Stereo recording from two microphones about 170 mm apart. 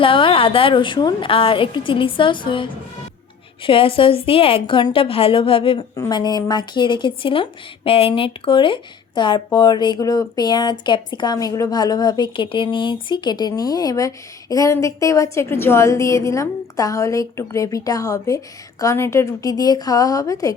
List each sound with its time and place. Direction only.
0.0 s a woman's voice: 30° left (ahead or behind)